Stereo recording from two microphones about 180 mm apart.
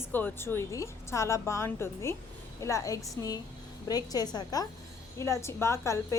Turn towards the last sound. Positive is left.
turn(degrees=15)  # may be behind; listen again after turning